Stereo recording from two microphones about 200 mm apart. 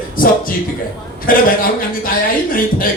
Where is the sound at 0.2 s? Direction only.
45° left (ahead or behind).